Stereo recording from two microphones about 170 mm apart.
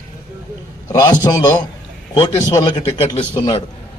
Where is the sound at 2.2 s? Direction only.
25° left (ahead or behind).